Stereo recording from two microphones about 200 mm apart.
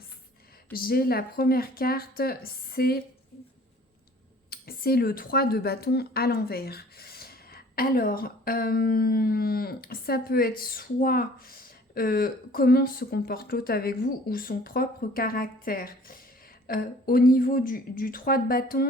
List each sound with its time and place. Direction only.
0.7 s speech: 50° left (ahead or behind)
4.4 s speech: 50° left (ahead or behind)